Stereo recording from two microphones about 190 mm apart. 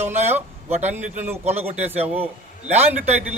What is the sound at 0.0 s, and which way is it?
Speech, 35° right (ahead or behind).